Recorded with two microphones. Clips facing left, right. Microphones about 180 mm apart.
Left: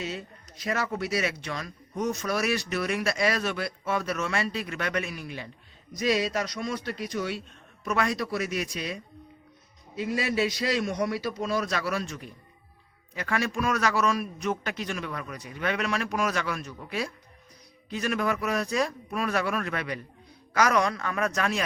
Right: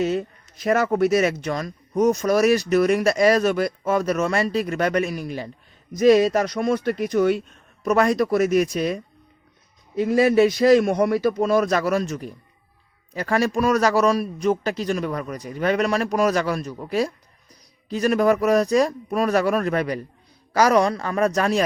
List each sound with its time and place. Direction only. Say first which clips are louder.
0.0 s speech: right 12 dB; 50° right (ahead or behind)
5.9 s a man's voice: right 11 dB; 50° right (ahead or behind)